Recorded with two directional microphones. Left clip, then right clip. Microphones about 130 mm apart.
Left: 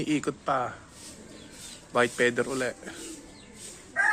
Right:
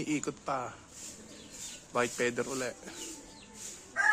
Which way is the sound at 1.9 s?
10° right (ahead or behind).